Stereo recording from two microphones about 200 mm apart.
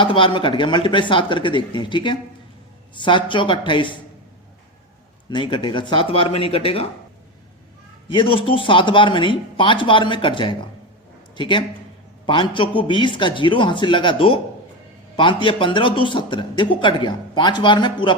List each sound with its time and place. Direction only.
0.0 s a man's voice: 25° left (ahead or behind)
5.3 s a man's voice: 25° left (ahead or behind)
8.1 s a man's voice: 25° left (ahead or behind)